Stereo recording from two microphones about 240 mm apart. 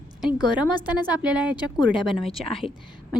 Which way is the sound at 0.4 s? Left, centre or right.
Centre.